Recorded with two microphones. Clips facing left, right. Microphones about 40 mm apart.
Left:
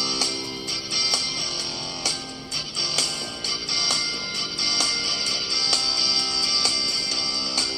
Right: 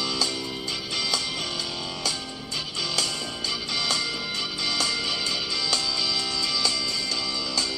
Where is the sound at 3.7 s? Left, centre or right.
Right.